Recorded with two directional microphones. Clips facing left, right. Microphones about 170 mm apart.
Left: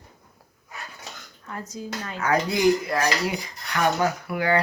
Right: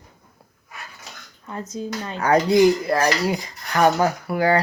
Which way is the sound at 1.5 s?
20° right (ahead or behind).